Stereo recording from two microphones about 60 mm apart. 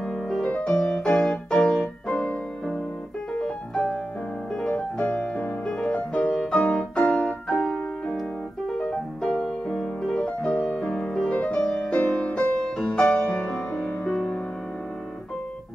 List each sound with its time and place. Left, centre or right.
0.0 s music: centre
0.5 s music: left
0.7 s music: centre
3.3 s music: centre
6.3 s piano: centre
6.6 s music: centre
13.7 s music: left
14.1 s music: centre